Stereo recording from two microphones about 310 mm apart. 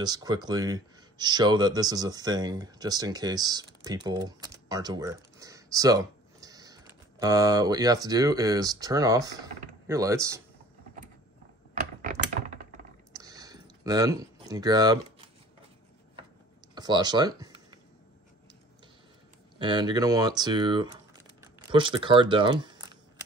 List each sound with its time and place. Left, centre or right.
0.0 s speech: centre
11.7 s typing: right
13.1 s a sound: centre
16.7 s speech: centre
19.6 s speech: centre